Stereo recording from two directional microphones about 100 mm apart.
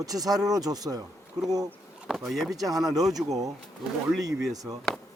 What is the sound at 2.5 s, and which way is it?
Speech, 40° right (ahead or behind).